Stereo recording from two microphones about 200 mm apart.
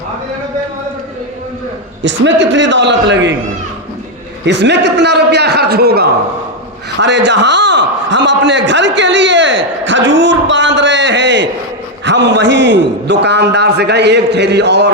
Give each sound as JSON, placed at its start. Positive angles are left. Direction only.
{"t": 2.0, "sound": "a man's voice", "side_deg": -65}
{"t": 4.4, "sound": "a man's voice", "side_deg": -60}